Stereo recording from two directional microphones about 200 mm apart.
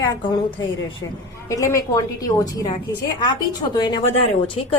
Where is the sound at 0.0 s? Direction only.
20° left (ahead or behind).